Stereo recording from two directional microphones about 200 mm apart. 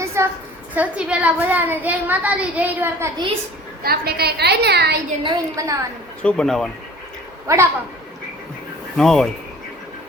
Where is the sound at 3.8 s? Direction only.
50° right (ahead or behind).